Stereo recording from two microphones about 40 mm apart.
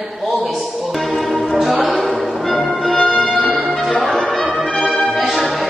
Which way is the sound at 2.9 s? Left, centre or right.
Centre.